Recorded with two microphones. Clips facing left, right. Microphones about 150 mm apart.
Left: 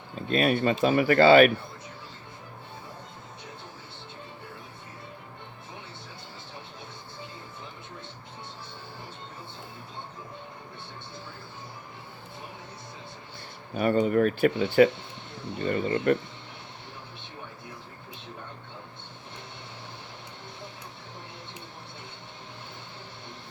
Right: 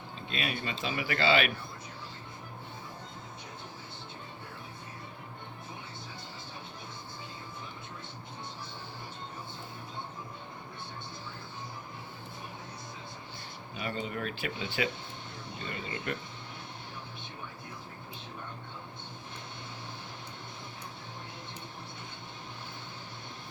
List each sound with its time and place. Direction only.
0.2 s speech: 50° left (ahead or behind)
13.7 s speech: 50° left (ahead or behind)